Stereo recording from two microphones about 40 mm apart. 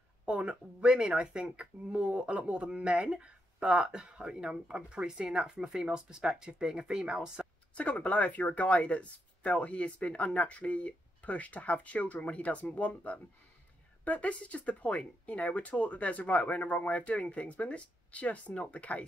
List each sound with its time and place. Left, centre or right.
0.2 s speech: right
7.7 s speech: left